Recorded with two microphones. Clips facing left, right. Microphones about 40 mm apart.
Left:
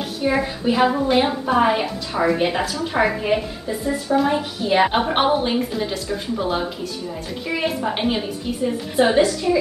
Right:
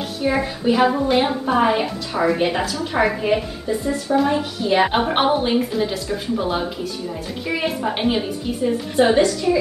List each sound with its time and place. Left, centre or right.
0.2 s a woman's voice: centre